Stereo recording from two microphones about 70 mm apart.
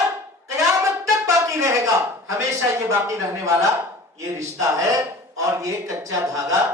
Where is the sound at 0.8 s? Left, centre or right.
Right.